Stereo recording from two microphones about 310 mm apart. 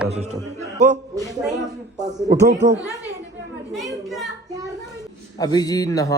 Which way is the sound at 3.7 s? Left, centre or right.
Centre.